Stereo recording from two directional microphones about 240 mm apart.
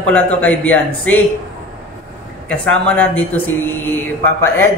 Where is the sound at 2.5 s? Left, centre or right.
Centre.